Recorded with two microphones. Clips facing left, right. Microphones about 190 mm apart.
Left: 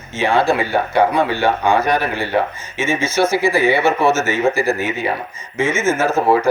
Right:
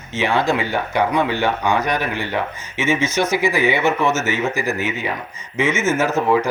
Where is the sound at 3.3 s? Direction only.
15° right (ahead or behind).